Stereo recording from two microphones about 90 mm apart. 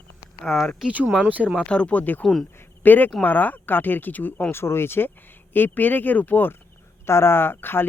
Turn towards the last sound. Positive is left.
turn(degrees=25)  # may be behind; listen again after turning